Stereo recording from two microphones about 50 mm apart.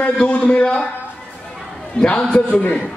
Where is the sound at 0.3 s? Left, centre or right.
Left.